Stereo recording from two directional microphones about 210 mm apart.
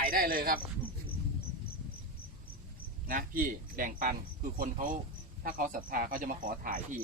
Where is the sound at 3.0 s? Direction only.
40° right (ahead or behind).